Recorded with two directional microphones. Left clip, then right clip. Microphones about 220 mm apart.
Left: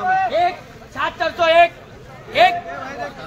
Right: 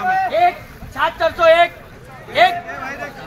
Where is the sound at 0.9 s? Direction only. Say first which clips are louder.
Right 4 dB; 10° left (ahead or behind).